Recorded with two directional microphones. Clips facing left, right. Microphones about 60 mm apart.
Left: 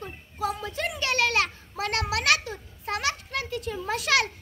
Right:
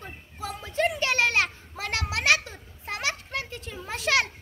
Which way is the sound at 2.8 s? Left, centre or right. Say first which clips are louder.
Left 2 dB; right.